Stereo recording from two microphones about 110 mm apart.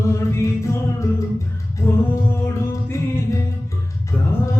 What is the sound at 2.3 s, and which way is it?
Music, 20° left (ahead or behind).